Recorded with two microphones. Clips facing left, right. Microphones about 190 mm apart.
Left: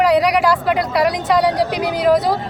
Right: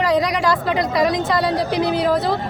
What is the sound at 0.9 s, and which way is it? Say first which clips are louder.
Speech: left 1 dB; 75° left (ahead or behind).